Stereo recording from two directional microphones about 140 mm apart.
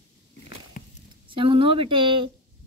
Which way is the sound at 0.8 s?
65° left (ahead or behind).